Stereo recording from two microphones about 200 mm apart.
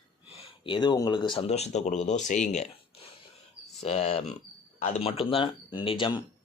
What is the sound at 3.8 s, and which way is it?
Speech, 30° left (ahead or behind).